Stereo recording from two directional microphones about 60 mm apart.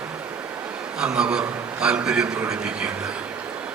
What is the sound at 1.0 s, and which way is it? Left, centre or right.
A man's voice, centre.